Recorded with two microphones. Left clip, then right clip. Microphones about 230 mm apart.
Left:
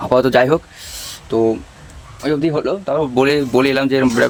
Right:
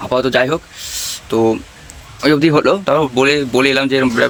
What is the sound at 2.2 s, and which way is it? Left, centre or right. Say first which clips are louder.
Speech: right 6 dB; right.